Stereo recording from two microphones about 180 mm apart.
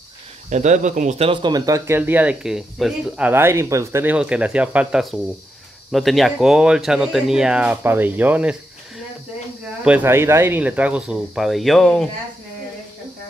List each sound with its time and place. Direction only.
0.5 s speech: 40° right (ahead or behind); by 8.5 s 10° right (ahead or behind)
9.8 s speech: 10° right (ahead or behind)